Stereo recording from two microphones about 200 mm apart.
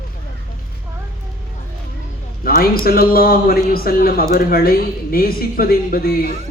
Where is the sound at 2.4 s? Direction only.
45° left (ahead or behind).